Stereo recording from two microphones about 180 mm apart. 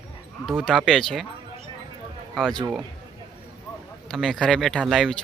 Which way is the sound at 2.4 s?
Centre (ahead or behind).